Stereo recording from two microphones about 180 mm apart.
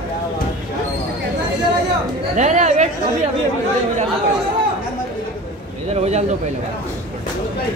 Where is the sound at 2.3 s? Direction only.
40° right (ahead or behind).